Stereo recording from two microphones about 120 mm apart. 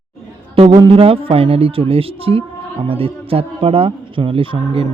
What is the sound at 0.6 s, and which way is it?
Speech, 75° right (ahead or behind).